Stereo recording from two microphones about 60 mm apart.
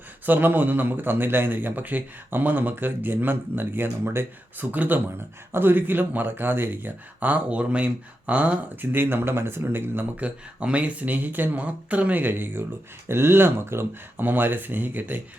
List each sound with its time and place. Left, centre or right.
0.3 s a man's voice: right
4.5 s a man's voice: right
10.2 s a man's voice: right